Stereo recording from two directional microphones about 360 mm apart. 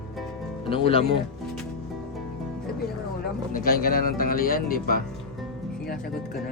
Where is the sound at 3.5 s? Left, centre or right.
Left.